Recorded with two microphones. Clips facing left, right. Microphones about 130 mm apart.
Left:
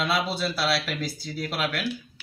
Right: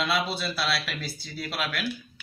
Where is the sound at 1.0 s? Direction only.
40° left (ahead or behind).